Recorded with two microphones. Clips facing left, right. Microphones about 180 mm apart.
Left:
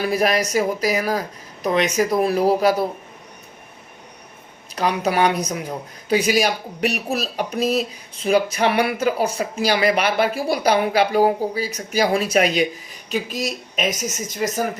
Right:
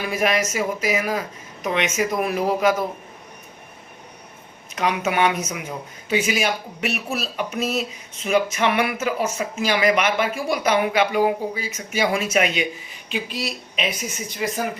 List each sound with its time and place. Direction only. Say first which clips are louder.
0.0 s speech: left 2 dB; 35° left (ahead or behind)
4.7 s speech: left 2 dB; 35° left (ahead or behind)